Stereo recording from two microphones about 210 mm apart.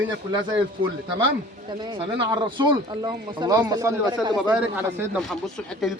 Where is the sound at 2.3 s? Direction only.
20° right (ahead or behind).